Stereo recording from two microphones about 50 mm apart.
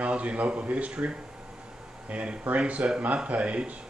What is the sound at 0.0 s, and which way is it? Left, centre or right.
Speech, right.